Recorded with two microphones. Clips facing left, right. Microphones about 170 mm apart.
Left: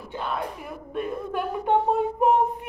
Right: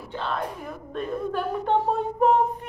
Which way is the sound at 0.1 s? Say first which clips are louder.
Right 1 dB; 10° left (ahead or behind).